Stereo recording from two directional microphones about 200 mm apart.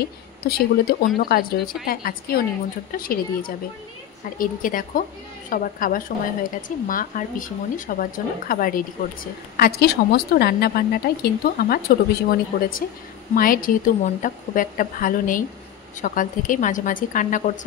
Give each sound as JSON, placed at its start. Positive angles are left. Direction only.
{"t": 0.0, "sound": "a woman's voice", "side_deg": 50}